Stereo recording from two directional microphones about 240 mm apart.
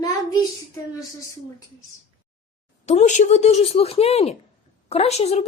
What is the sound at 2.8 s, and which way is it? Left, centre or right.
Speech, left.